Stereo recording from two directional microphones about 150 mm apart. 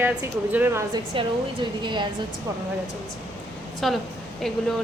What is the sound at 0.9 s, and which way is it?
A woman's voice, 30° right (ahead or behind).